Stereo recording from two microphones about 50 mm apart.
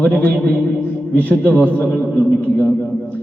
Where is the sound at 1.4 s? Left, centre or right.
Left.